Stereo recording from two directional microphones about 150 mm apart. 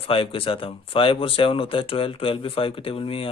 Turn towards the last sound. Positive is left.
turn(degrees=40)  # may be behind; listen again after turning